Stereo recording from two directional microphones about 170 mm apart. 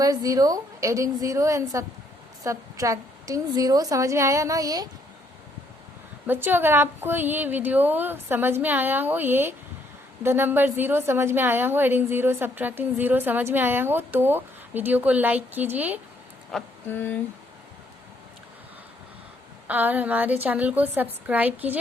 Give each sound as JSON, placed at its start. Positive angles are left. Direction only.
{"t": 0.0, "sound": "a woman's voice", "side_deg": -20}
{"t": 6.2, "sound": "a woman's voice", "side_deg": -10}
{"t": 16.5, "sound": "speech", "side_deg": 5}
{"t": 19.6, "sound": "a woman's voice", "side_deg": -10}